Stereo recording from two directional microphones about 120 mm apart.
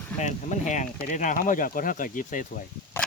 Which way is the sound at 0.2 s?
90° left.